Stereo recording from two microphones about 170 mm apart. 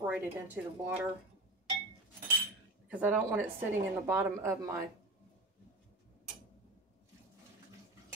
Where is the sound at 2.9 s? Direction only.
10° right (ahead or behind).